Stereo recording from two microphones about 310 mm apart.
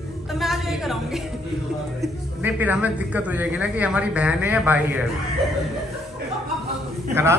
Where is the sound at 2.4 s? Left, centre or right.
Centre.